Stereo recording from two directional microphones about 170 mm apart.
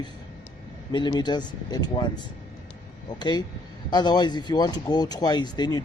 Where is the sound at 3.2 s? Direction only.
25° left (ahead or behind).